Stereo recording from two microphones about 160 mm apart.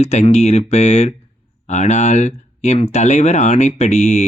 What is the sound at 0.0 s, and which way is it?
Speech, 45° left (ahead or behind).